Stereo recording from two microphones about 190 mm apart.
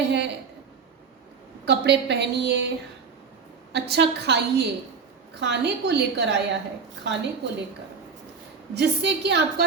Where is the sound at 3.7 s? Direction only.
60° right (ahead or behind).